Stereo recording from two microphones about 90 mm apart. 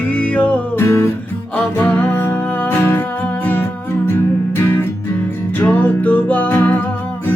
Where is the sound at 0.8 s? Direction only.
30° left (ahead or behind).